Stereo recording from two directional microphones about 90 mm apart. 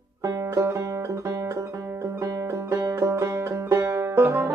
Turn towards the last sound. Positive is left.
turn(degrees=-25)  # may be behind; listen again after turning